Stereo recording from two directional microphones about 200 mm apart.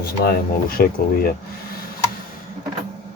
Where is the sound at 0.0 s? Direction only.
50° left (ahead or behind).